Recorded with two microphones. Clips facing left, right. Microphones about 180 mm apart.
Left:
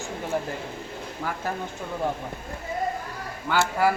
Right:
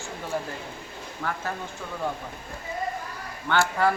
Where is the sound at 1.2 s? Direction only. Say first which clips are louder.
Right 1 dB; 10° left (ahead or behind).